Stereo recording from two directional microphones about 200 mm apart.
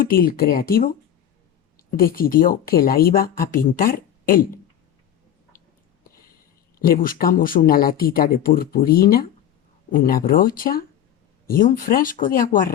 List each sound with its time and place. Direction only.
0.0 s speech: 45° left (ahead or behind)
2.0 s speech: 45° left (ahead or behind)
6.7 s speech: 45° left (ahead or behind)